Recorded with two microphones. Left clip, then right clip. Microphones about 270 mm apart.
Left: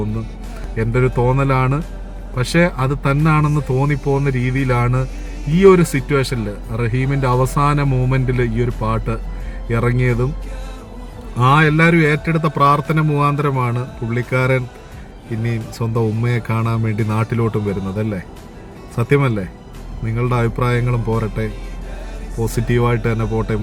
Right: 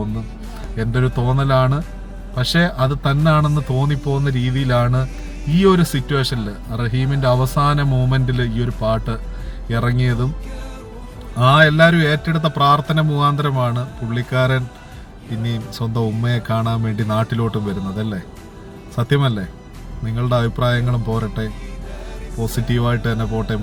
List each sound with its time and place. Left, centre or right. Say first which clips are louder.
0.8 s a man's voice: left 5 dB; centre
11.3 s a man's voice: right 2 dB; centre
16.0 s a man's voice: left 3 dB; centre
22.5 s a man's voice: left 4 dB; centre